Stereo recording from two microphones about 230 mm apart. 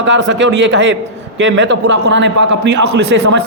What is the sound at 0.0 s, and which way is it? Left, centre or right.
A man's voice, right.